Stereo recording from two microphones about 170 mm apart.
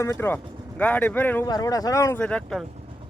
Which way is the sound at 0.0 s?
15° left (ahead or behind).